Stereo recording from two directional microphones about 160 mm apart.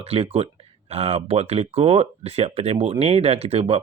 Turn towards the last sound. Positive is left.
turn(degrees=-40)  # may be behind; listen again after turning